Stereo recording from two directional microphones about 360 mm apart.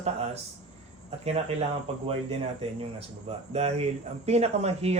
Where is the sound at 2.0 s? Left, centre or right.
Centre.